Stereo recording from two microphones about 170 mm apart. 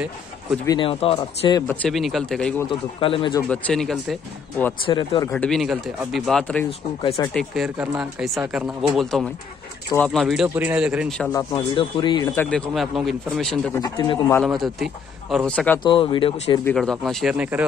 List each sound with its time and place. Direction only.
0.7 s speech: 30° left (ahead or behind)
1.7 s speech: 5° left (ahead or behind)
3.0 s speech: 30° left (ahead or behind)
3.4 s speech: 5° left (ahead or behind)
4.8 s speech: 30° left (ahead or behind)
5.3 s speech: centre (ahead or behind)
11.3 s speech: 25° left (ahead or behind)
12.4 s speech: 5° left (ahead or behind)
13.7 s speech: 20° left (ahead or behind)
14.4 s speech: centre (ahead or behind)
15.8 s speech: 30° left (ahead or behind)
16.7 s speech: centre (ahead or behind)